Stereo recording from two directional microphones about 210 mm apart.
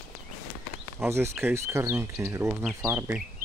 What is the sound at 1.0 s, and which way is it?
Speech, 10° right (ahead or behind).